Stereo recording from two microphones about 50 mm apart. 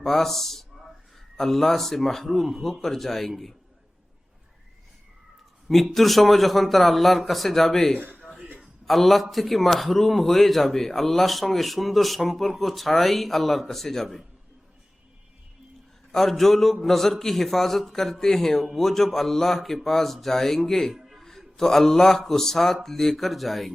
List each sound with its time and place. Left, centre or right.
0.0 s a sound: centre
1.4 s a man's voice: centre
5.6 s a man's voice: centre
16.1 s a man's voice: centre
20.9 s music: centre
21.2 s a man's voice: centre